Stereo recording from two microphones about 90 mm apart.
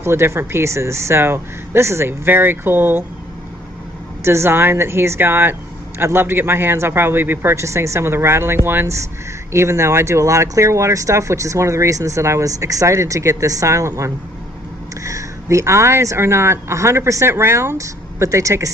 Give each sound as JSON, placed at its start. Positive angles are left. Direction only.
{"t": 0.0, "sound": "speech", "side_deg": -30}
{"t": 4.2, "sound": "speech", "side_deg": -30}